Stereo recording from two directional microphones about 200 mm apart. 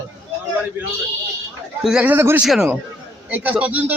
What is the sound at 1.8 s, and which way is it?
A man's voice, 5° right (ahead or behind).